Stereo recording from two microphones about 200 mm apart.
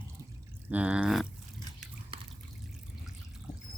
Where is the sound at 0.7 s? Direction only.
5° right (ahead or behind).